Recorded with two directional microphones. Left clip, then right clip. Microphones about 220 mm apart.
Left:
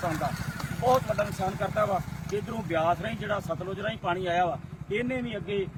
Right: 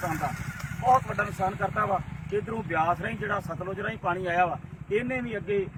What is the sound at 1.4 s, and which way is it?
Speech, centre (ahead or behind).